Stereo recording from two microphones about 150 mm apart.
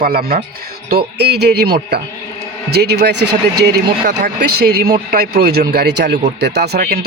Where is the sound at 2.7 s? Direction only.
90° right.